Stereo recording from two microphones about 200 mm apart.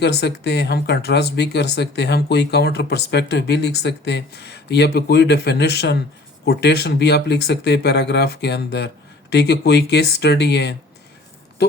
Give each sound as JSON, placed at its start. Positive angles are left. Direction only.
{"t": 0.0, "sound": "speech", "side_deg": 55}